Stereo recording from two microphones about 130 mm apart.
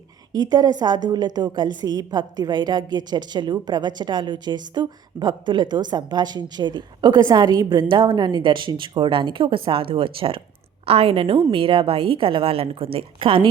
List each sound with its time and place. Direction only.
0.3 s a woman's voice: 35° right (ahead or behind)